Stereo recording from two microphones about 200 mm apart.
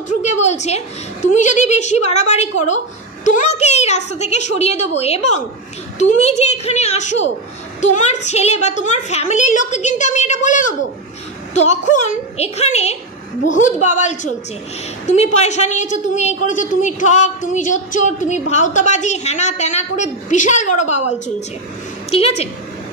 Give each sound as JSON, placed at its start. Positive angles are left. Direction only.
{"t": 0.2, "sound": "a woman's voice", "side_deg": 35}